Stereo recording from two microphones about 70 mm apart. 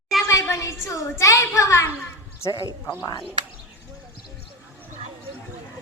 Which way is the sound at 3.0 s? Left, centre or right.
Left.